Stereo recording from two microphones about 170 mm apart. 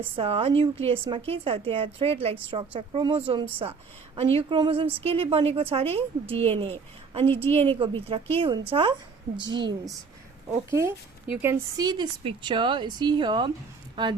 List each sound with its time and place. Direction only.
0.2 s a woman's voice: 35° right (ahead or behind)
10.7 s a woman's voice: 15° right (ahead or behind)
11.9 s speech: 25° right (ahead or behind)